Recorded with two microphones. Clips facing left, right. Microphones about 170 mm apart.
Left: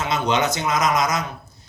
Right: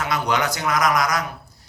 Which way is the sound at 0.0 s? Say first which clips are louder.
Left 1 dB; 20° left (ahead or behind).